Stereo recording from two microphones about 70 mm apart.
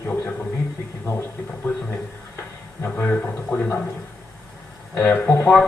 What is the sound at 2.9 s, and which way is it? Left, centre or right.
Speech, centre.